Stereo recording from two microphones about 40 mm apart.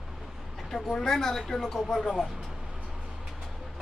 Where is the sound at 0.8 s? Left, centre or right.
Centre.